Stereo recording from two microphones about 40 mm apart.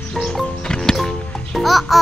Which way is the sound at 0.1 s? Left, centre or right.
Centre.